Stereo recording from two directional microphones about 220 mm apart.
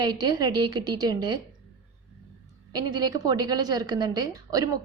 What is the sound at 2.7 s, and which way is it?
A woman's voice, 20° right (ahead or behind).